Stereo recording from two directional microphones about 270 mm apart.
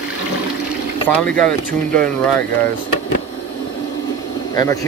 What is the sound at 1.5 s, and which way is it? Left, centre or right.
Speech, right.